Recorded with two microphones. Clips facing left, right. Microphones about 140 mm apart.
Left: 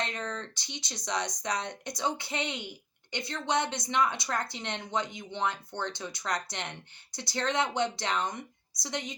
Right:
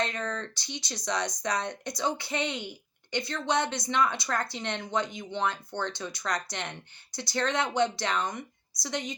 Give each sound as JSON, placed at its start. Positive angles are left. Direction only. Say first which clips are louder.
{"t": 0.0, "sound": "speech", "louder": "right 3 dB", "side_deg": 20}